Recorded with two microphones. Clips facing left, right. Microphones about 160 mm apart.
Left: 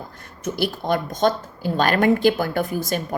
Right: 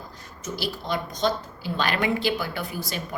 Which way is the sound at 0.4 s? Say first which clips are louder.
Left 7 dB; 55° left (ahead or behind).